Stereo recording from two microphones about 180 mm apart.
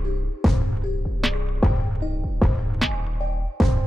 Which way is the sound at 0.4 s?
Centre (ahead or behind).